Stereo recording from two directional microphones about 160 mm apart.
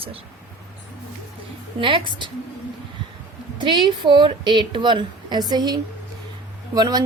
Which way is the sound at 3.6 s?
30° right (ahead or behind).